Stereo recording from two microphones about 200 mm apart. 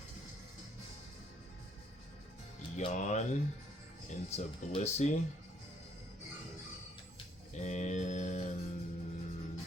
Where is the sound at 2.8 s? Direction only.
35° left (ahead or behind).